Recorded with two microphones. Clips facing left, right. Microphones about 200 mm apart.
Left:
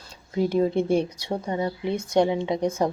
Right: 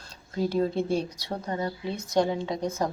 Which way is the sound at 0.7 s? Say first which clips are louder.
Left 5 dB; 55° left (ahead or behind).